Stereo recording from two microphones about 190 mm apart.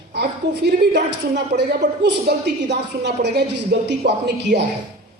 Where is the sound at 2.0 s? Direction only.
60° right (ahead or behind).